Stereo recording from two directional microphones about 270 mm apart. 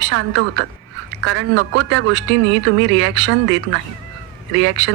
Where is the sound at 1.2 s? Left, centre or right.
Right.